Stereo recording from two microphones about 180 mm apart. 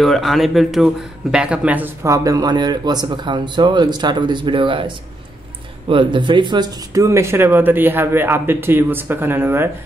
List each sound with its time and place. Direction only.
0.0 s speech: centre (ahead or behind)